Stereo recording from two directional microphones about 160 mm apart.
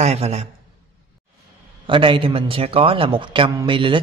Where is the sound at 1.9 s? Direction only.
35° right (ahead or behind).